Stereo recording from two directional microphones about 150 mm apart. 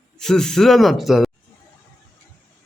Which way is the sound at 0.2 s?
5° left (ahead or behind).